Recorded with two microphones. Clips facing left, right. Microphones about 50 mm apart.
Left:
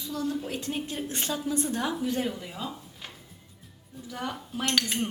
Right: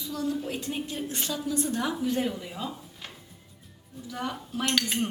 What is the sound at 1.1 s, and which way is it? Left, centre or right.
Speech, left.